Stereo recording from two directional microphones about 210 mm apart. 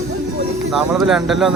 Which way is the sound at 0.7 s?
Centre (ahead or behind).